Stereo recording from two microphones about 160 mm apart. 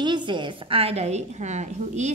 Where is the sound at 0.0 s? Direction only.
30° right (ahead or behind).